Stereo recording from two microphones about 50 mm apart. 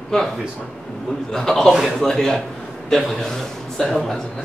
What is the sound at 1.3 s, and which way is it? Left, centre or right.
Speech, centre.